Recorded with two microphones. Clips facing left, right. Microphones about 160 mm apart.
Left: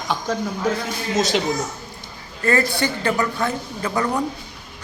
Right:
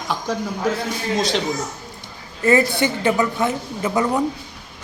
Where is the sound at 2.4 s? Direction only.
20° right (ahead or behind).